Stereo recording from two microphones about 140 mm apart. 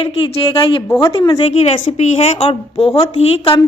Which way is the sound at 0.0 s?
45° left (ahead or behind).